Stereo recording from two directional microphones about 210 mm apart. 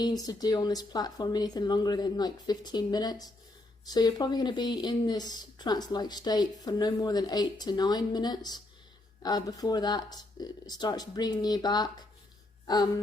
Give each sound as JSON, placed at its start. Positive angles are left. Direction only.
{"t": 0.0, "sound": "speech", "side_deg": 20}